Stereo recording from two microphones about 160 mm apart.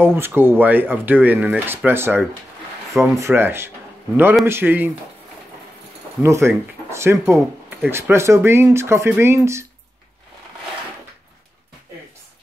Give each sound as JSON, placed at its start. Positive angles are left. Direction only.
{"t": 0.0, "sound": "speech", "side_deg": -15}
{"t": 6.2, "sound": "speech", "side_deg": -15}